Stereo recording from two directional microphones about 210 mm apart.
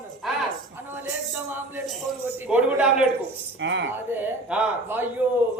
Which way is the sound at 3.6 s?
60° right (ahead or behind).